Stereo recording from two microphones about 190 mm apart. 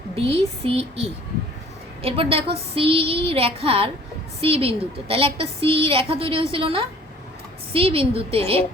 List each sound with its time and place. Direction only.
0.2 s a woman's voice: 30° right (ahead or behind)